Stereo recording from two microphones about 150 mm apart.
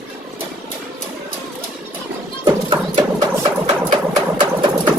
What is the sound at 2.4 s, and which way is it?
Music, 25° right (ahead or behind).